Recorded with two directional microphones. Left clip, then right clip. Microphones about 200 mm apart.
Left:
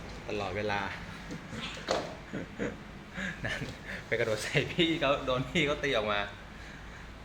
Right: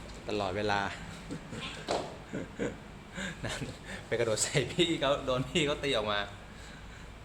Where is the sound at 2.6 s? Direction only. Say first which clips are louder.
Even; 10° right (ahead or behind).